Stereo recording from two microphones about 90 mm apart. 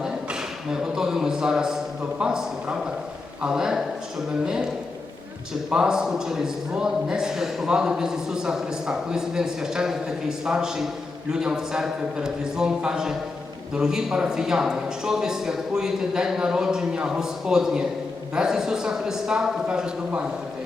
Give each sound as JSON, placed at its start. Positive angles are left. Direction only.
{"t": 0.7, "sound": "a man's voice", "side_deg": -5}
{"t": 5.7, "sound": "a man's voice", "side_deg": -5}